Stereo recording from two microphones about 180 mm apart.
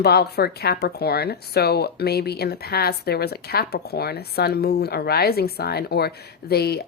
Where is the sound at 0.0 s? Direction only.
60° left (ahead or behind).